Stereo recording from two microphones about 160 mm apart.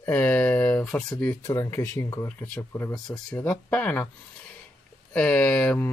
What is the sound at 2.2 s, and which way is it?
Speech, 10° left (ahead or behind).